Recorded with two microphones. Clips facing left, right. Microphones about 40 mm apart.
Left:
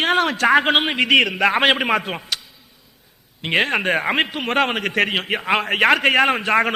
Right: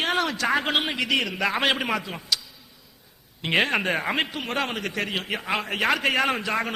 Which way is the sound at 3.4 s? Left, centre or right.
Centre.